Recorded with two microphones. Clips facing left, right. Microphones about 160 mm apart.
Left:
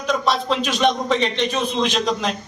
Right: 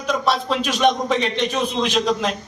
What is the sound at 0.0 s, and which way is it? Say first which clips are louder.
A man's voice: even; 5° right (ahead or behind).